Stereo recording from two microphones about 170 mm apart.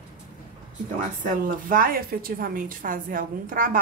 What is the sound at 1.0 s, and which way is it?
A woman's voice, 55° right (ahead or behind).